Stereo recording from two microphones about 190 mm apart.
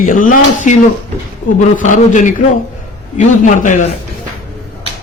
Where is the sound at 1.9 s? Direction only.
40° left (ahead or behind).